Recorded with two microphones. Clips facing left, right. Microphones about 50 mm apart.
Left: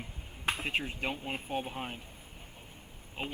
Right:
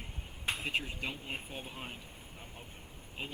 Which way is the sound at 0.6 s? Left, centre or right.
Left.